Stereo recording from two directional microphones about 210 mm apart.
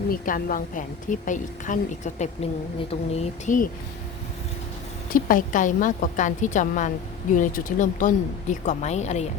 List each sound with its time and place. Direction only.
0.1 s a woman's voice: 40° left (ahead or behind)
5.1 s a woman's voice: 40° left (ahead or behind)